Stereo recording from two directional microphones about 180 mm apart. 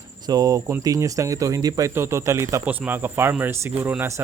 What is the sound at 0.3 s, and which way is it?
A man's voice, 20° right (ahead or behind).